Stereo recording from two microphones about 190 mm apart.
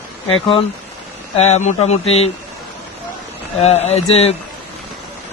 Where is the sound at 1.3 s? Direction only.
35° left (ahead or behind).